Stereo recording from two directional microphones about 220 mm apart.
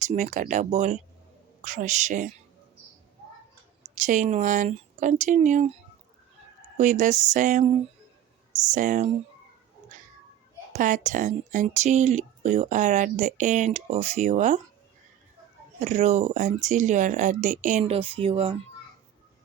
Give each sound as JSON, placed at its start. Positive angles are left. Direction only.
{"t": 0.0, "sound": "speech", "side_deg": -35}
{"t": 4.0, "sound": "speech", "side_deg": -35}
{"t": 6.7, "sound": "speech", "side_deg": -35}
{"t": 10.7, "sound": "speech", "side_deg": -35}
{"t": 15.8, "sound": "speech", "side_deg": -30}